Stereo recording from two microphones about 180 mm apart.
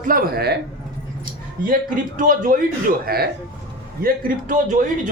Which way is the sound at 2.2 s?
50° right (ahead or behind).